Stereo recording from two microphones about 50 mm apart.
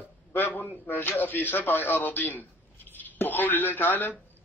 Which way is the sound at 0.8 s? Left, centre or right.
Left.